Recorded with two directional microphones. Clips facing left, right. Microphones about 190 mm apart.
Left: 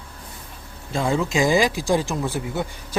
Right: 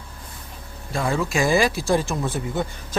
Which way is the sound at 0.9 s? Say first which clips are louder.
Left 2 dB; 20° left (ahead or behind).